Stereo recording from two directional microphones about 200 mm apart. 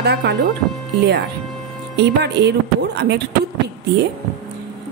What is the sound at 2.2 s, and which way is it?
Speech, 60° right (ahead or behind).